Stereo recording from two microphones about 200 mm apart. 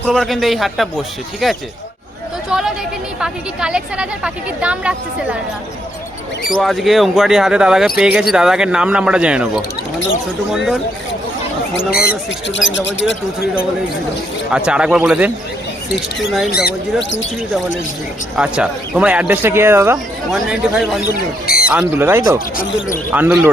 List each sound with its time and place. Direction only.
0.0 s speech: centre (ahead or behind)
2.5 s chatter: centre (ahead or behind)
3.2 s speech: 5° right (ahead or behind)
6.5 s speech: centre (ahead or behind)
12.7 s speech: 65° left (ahead or behind)
14.5 s speech: 5° right (ahead or behind)
16.5 s speech: 55° left (ahead or behind)
17.0 s speech: 65° left (ahead or behind)
18.3 s speech: 5° right (ahead or behind)
20.3 s speech: centre (ahead or behind)
21.1 s speech: 50° left (ahead or behind)
21.7 s speech: 5° right (ahead or behind)